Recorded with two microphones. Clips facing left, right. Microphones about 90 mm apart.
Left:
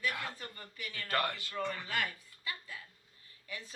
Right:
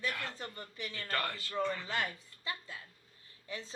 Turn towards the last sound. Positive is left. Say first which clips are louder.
# right 2 dB
turn(degrees=-25)  # may be behind; listen again after turning